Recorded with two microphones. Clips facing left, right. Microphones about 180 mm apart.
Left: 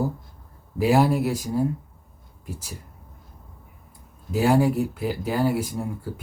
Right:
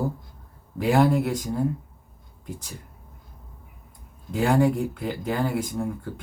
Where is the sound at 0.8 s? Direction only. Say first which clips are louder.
Left 1 dB; 10° left (ahead or behind).